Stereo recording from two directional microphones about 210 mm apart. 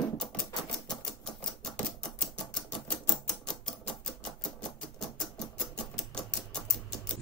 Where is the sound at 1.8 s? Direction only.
5° left (ahead or behind).